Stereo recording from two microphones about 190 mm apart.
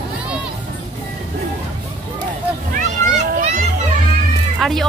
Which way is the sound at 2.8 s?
40° right (ahead or behind).